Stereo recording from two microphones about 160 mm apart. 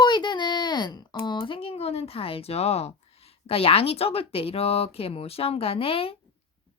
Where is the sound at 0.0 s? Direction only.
30° left (ahead or behind).